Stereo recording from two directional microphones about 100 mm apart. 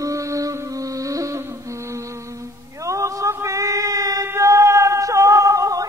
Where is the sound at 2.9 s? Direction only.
30° right (ahead or behind).